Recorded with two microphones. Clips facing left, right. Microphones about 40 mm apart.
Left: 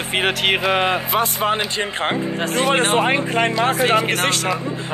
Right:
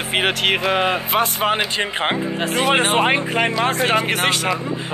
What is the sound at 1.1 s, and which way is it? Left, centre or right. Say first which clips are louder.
Speech: right 1 dB; right.